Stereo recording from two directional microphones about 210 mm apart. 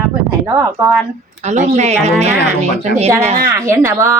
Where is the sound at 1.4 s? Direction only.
35° right (ahead or behind).